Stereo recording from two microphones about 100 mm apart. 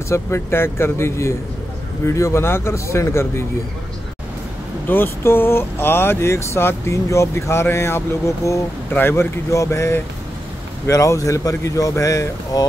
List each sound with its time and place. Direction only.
0.1 s speech: 25° left (ahead or behind)
4.8 s speech: 20° left (ahead or behind)